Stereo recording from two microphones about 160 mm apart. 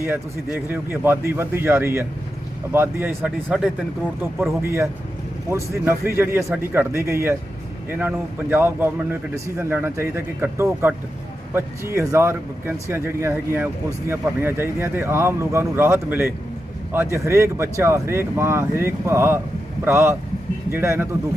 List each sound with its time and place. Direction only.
0.0 s a man's voice: 10° right (ahead or behind)